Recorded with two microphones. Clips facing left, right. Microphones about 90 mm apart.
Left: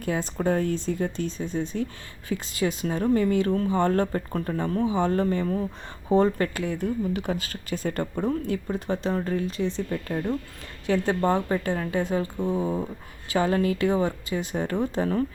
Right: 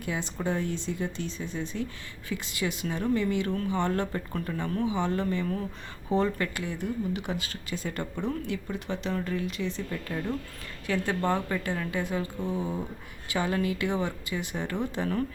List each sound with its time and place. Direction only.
0.0 s speech: 45° left (ahead or behind)
7.3 s speech: 45° left (ahead or behind)
10.8 s speech: 30° left (ahead or behind)